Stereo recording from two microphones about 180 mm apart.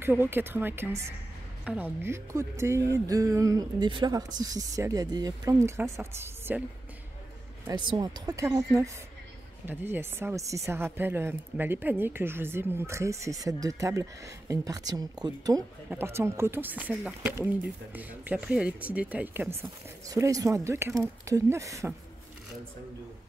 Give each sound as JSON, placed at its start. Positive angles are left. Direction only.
{"t": 0.0, "sound": "a woman's voice", "side_deg": -10}
{"t": 7.9, "sound": "speech", "side_deg": -25}
{"t": 9.7, "sound": "a woman's voice", "side_deg": -10}